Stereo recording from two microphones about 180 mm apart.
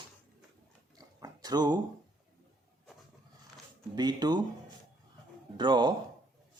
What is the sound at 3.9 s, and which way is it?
Speech, 25° right (ahead or behind).